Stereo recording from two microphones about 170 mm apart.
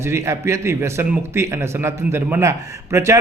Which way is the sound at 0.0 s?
15° right (ahead or behind).